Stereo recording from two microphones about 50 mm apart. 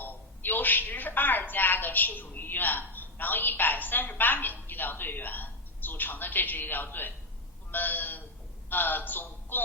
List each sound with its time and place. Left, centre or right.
0.0 s a woman's voice: left